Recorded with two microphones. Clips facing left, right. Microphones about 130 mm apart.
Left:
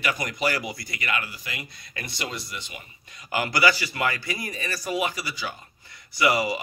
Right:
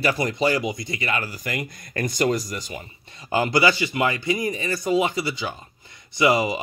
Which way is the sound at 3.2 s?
25° right (ahead or behind).